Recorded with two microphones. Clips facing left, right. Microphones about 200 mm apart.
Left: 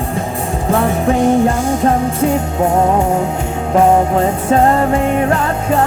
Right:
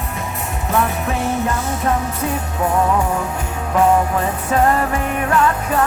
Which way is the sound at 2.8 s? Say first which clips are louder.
Left 5 dB; 40° left (ahead or behind).